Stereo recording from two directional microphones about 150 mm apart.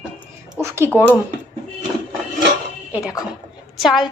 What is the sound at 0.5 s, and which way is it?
Speech, 20° right (ahead or behind).